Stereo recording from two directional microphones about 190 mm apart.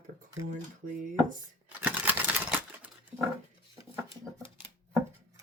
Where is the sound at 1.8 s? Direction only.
10° right (ahead or behind).